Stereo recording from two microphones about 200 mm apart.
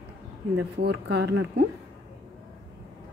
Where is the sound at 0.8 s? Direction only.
55° right (ahead or behind).